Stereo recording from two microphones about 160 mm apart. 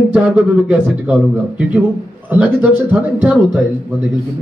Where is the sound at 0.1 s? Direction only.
10° right (ahead or behind).